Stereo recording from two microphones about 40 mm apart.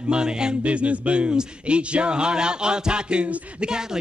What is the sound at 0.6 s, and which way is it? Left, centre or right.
A man's voice, right.